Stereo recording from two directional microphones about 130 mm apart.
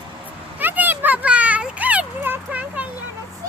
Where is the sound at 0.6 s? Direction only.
15° right (ahead or behind).